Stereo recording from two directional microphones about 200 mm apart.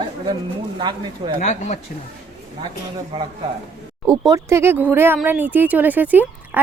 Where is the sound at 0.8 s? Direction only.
20° right (ahead or behind).